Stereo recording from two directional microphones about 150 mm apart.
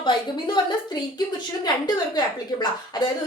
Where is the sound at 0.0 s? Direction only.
30° left (ahead or behind).